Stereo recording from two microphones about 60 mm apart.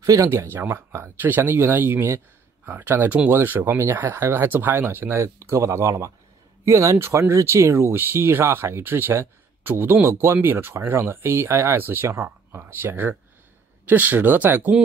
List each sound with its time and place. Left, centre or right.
0.0 s speech: right
11.8 s speech: right